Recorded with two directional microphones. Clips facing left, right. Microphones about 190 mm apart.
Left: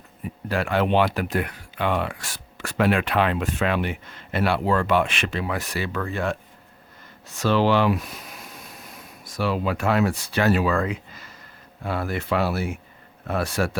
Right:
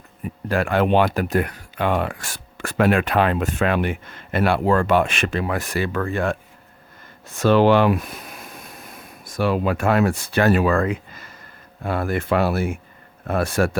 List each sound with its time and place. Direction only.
0.4 s speech: 50° right (ahead or behind)